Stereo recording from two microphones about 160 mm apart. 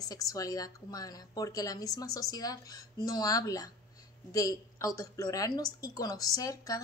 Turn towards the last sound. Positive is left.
turn(degrees=20)  # may be behind; listen again after turning